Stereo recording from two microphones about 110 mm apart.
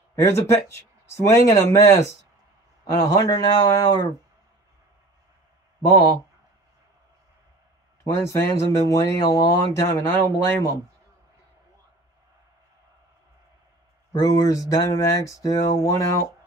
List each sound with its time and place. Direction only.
0.1 s a man's voice: 25° left (ahead or behind)
8.0 s a man's voice: 25° left (ahead or behind)
14.1 s a man's voice: 30° left (ahead or behind)